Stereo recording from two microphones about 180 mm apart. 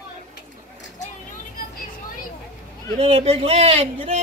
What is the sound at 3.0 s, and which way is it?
Speech, 35° right (ahead or behind).